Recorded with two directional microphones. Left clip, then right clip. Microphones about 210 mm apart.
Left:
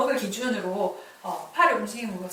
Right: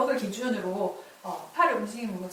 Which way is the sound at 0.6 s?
30° right (ahead or behind).